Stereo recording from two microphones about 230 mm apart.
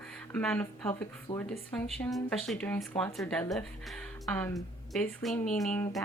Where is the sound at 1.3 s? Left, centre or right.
Left.